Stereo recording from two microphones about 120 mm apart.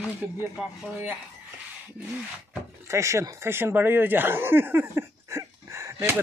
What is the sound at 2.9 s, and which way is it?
Speech, 25° right (ahead or behind).